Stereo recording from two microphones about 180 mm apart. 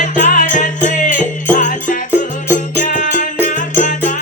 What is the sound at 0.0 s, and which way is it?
Music, 45° left (ahead or behind).